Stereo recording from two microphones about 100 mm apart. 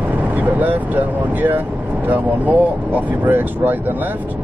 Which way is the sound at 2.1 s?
20° right (ahead or behind).